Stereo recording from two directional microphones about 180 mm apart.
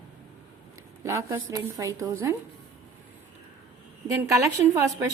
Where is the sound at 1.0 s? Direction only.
15° right (ahead or behind).